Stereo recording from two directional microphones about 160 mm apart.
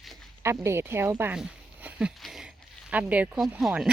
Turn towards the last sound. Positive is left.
turn(degrees=-5)  # may be behind; listen again after turning